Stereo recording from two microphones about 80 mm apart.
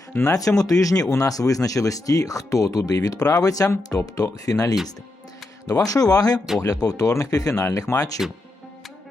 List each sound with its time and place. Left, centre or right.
0.3 s speech: left